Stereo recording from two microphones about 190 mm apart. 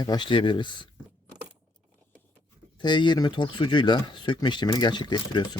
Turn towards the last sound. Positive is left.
turn(degrees=25)  # may be behind; listen again after turning